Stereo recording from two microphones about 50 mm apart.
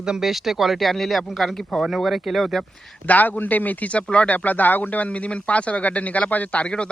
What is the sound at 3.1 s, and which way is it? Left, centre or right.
A man's voice, left.